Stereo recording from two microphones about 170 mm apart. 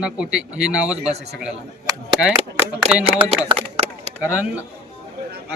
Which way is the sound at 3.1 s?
35° right (ahead or behind).